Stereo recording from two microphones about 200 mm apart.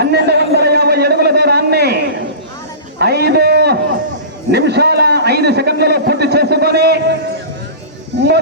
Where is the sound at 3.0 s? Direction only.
55° right (ahead or behind).